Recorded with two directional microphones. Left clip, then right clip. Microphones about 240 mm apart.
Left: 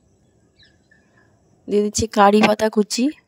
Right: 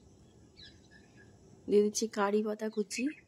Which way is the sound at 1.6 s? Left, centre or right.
Left.